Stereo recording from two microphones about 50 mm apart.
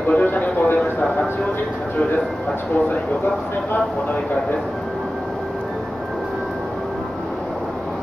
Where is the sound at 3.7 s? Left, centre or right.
Left.